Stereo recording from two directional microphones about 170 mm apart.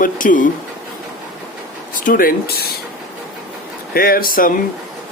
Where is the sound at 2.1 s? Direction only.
55° left (ahead or behind).